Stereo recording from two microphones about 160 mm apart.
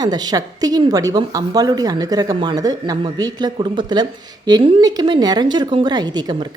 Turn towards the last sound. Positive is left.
turn(degrees=-25)  # may be behind; listen again after turning